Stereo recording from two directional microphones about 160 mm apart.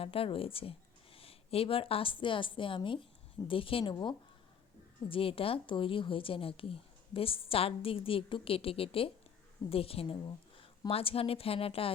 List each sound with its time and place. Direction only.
0.0 s speech: 35° left (ahead or behind)
5.0 s a woman's voice: 35° left (ahead or behind)